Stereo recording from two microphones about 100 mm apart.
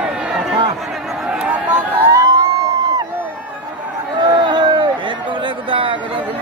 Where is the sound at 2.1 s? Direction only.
40° right (ahead or behind).